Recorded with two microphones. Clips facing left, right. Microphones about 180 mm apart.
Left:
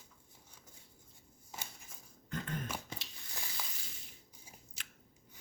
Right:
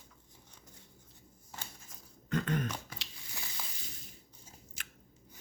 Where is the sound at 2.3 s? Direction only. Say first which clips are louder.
Right 8 dB; 80° right.